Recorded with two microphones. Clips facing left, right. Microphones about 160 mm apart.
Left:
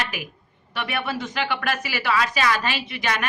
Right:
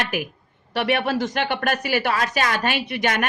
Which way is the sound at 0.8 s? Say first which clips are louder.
Right 6 dB; 65° right (ahead or behind).